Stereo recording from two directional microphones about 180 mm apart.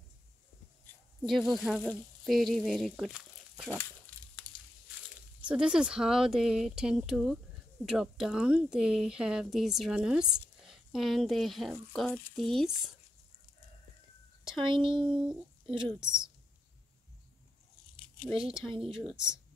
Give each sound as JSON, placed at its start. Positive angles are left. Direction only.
{"t": 1.2, "sound": "sizzle", "side_deg": 0}
{"t": 5.1, "sound": "speech", "side_deg": -5}
{"t": 14.6, "sound": "speech", "side_deg": -30}
{"t": 18.3, "sound": "speech", "side_deg": -5}